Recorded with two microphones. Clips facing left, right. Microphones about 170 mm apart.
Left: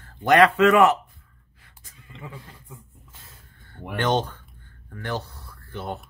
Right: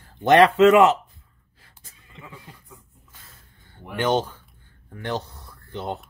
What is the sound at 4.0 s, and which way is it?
Speech, 10° right (ahead or behind).